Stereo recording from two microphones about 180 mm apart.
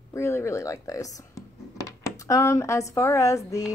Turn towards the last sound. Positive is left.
turn(degrees=15)  # may be behind; listen again after turning